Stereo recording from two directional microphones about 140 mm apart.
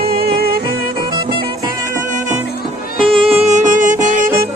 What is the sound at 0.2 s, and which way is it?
Music, 90° right.